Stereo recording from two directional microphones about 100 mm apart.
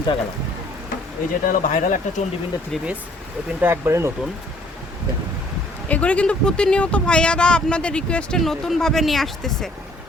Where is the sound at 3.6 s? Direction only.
20° right (ahead or behind).